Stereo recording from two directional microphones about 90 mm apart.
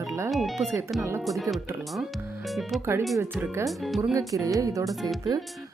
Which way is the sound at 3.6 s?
Centre (ahead or behind).